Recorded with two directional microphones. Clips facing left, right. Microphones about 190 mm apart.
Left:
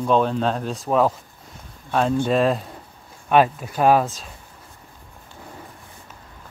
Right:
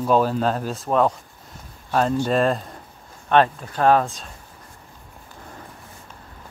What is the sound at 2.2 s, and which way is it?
Speech, centre (ahead or behind).